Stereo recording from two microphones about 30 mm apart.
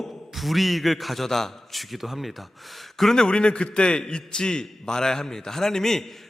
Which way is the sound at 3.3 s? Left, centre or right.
Left.